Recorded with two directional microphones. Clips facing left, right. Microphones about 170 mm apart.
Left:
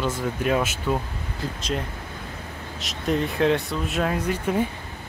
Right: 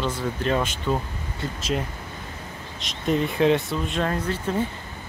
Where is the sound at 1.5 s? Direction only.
5° right (ahead or behind); by 4.6 s 15° left (ahead or behind).